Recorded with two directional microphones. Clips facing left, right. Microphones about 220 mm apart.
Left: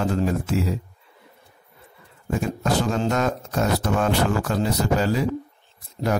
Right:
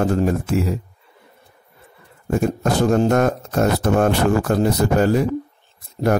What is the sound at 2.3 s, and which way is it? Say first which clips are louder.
Speech: right 4 dB; 50° right (ahead or behind).